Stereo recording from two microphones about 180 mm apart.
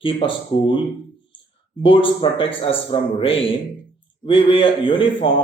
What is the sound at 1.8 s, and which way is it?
A man's voice, 30° left (ahead or behind).